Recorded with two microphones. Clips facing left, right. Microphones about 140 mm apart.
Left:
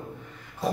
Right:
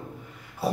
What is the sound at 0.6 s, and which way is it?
Speech, 10° right (ahead or behind).